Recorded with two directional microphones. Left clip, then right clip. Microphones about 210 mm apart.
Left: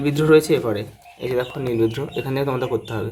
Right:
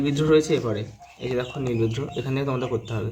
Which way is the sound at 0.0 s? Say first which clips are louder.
Left 4 dB; 25° left (ahead or behind).